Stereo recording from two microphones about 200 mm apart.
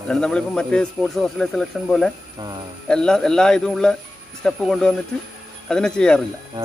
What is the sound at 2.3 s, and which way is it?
Speech, 20° right (ahead or behind).